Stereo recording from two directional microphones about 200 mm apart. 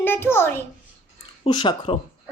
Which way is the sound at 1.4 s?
25° left (ahead or behind).